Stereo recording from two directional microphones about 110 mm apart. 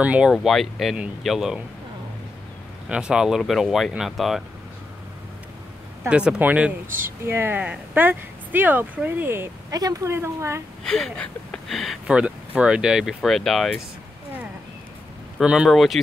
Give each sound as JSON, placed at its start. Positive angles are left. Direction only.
{"t": 0.0, "sound": "speech", "side_deg": -10}
{"t": 0.3, "sound": "speech", "side_deg": 0}
{"t": 2.9, "sound": "speech", "side_deg": -10}
{"t": 6.0, "sound": "speech", "side_deg": -10}
{"t": 9.7, "sound": "a woman's voice", "side_deg": -35}
{"t": 10.8, "sound": "speech", "side_deg": 5}
{"t": 12.2, "sound": "speech", "side_deg": -10}
{"t": 15.4, "sound": "speech", "side_deg": -5}